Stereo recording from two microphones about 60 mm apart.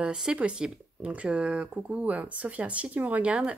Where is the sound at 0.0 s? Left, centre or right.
Centre.